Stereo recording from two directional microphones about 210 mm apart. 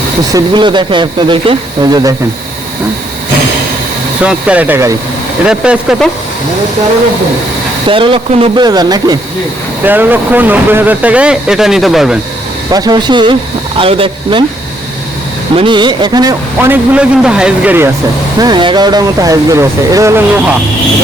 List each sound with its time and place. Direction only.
0.3 s speech: 20° right (ahead or behind)
4.2 s a man's voice: 5° right (ahead or behind)
7.9 s speech: 25° right (ahead or behind); by 12.2 s centre (ahead or behind)
12.7 s speech: 20° right (ahead or behind)
15.5 s a man's voice: 20° right (ahead or behind)
18.3 s a man's voice: 20° right (ahead or behind)